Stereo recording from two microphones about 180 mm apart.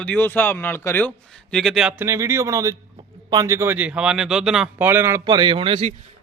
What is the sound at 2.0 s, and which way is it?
A man's voice, 15° right (ahead or behind).